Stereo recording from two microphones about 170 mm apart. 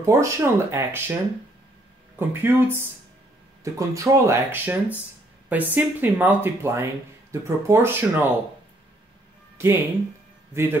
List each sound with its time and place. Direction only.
0.0 s speech: 20° right (ahead or behind)
2.1 s speech: 15° right (ahead or behind)
9.6 s a man's voice: 15° right (ahead or behind)